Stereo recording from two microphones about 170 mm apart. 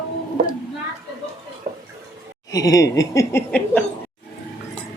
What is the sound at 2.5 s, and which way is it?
Speech, 20° left (ahead or behind).